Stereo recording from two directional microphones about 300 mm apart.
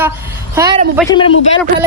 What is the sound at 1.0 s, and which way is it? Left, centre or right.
Speech, centre.